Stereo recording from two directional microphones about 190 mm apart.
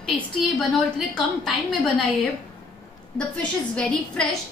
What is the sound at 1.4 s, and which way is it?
Speech, centre (ahead or behind).